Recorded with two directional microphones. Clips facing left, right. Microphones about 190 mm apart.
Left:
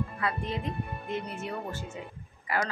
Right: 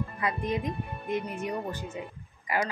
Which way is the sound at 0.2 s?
15° right (ahead or behind).